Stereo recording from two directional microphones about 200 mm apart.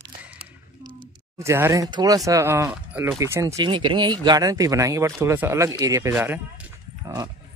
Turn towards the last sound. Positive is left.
turn(degrees=-15)  # may be behind; listen again after turning